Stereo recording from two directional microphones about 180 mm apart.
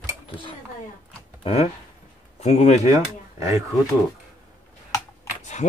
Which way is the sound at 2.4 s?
40° left (ahead or behind).